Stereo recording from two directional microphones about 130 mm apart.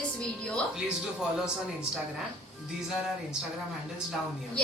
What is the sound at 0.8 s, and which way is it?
Speech, 5° right (ahead or behind).